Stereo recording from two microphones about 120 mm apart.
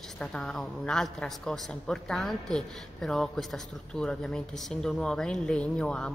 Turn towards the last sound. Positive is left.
turn(degrees=10)  # may be behind; listen again after turning